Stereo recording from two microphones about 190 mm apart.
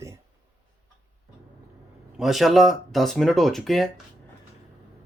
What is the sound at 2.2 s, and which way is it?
Speech, centre (ahead or behind).